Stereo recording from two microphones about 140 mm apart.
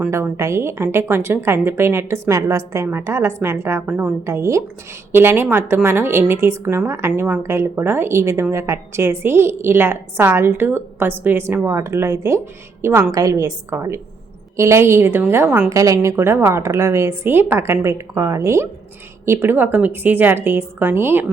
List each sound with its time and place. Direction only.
0.1 s a woman's voice: 20° right (ahead or behind)
15.7 s a woman's voice: 25° right (ahead or behind)